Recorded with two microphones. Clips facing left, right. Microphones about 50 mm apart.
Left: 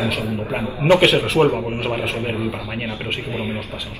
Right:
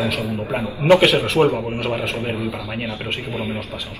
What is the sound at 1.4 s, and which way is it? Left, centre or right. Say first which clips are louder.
Speech: even; left.